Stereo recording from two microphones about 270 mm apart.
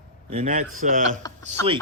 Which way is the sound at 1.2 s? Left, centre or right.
Centre.